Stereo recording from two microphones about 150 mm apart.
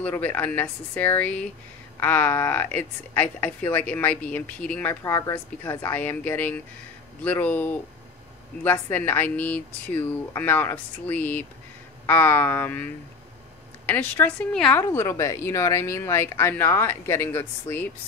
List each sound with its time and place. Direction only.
0.0 s speech: 10° left (ahead or behind)
5.0 s speech: 20° left (ahead or behind)
8.9 s speech: 15° left (ahead or behind)
14.8 s speech: 20° left (ahead or behind)